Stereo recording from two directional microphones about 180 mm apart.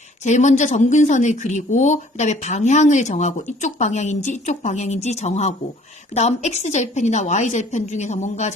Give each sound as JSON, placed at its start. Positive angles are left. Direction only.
{"t": 0.3, "sound": "speech", "side_deg": 40}